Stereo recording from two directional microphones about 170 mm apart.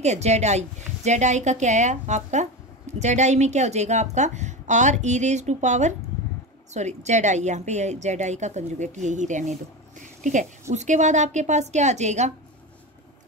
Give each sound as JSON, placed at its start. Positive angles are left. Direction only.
{"t": 0.0, "sound": "a woman's voice", "side_deg": -40}